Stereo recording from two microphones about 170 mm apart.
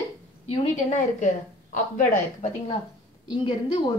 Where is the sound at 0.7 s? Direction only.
45° left (ahead or behind).